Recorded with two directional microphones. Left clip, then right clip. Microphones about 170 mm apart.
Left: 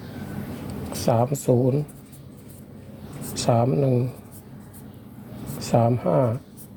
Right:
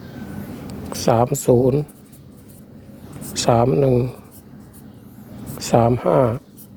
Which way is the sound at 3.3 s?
45° right (ahead or behind).